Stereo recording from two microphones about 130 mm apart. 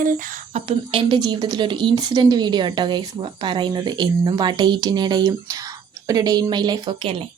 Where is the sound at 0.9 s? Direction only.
40° right (ahead or behind).